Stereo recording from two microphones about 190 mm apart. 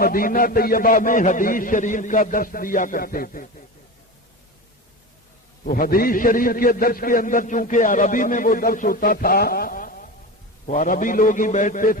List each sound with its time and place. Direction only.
0.0 s a man's voice: 50° left (ahead or behind)
5.6 s a man's voice: 50° left (ahead or behind)